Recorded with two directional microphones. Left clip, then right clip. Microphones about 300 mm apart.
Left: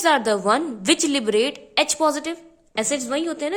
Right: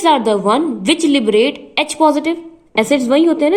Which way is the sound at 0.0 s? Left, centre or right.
Left.